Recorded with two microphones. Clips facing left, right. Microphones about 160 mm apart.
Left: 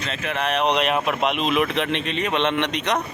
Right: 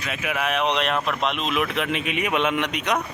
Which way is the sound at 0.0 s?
10° right (ahead or behind).